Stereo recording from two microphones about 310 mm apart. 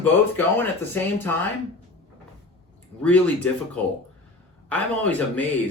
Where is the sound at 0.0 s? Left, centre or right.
Centre.